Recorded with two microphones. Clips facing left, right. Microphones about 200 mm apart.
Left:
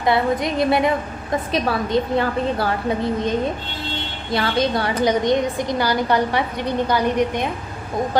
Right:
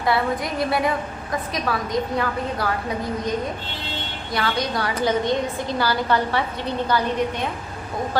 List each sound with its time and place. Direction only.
0.0 s a woman's voice: 20° left (ahead or behind)
4.3 s a woman's voice: 25° left (ahead or behind)